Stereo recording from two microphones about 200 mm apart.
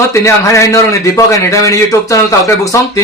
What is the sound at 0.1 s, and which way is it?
Speech, 15° left (ahead or behind).